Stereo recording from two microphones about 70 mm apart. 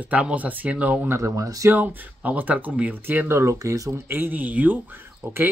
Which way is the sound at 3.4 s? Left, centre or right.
Right.